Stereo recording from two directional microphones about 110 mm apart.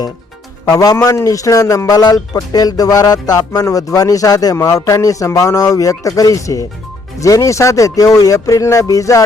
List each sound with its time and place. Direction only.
0.8 s speech: 30° left (ahead or behind)